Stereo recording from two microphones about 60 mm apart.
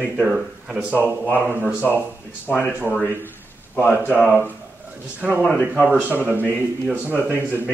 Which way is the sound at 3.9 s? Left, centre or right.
Right.